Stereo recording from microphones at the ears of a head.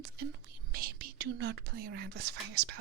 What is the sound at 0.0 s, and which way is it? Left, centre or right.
Speech, right.